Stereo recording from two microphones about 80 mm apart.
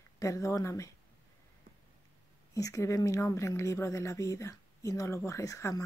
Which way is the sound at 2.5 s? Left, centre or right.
Left.